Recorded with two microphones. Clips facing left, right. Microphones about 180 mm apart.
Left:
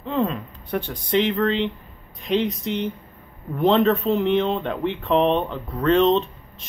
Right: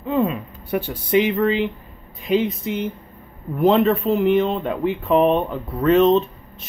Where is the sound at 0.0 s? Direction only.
5° right (ahead or behind).